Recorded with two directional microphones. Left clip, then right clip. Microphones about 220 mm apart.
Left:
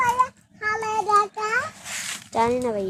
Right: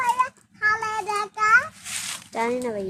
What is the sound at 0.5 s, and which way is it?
Child singing, 50° right (ahead or behind).